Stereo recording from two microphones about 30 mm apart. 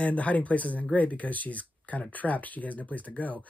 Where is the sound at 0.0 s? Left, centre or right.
Left.